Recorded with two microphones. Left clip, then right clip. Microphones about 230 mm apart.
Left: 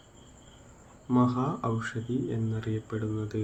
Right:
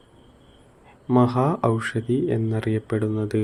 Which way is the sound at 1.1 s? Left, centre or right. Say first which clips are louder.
Right 7 dB; right.